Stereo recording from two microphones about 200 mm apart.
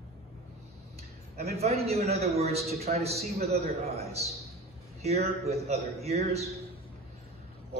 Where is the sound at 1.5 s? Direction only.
30° right (ahead or behind).